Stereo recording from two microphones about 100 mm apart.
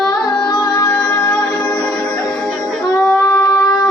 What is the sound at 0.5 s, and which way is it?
Music, 40° left (ahead or behind).